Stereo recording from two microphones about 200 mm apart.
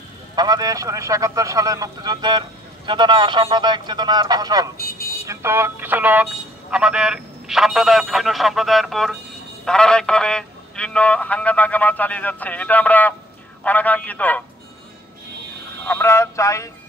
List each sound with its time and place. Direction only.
0.4 s a man's voice: 20° right (ahead or behind); by 14.4 s 10° left (ahead or behind)
15.8 s a man's voice: 10° left (ahead or behind)